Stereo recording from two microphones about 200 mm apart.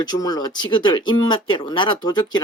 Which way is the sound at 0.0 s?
20° left (ahead or behind).